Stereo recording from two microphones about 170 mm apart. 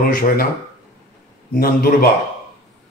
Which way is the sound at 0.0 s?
60° left (ahead or behind).